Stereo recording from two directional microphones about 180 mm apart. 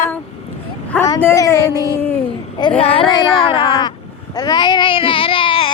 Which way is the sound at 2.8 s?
30° left (ahead or behind).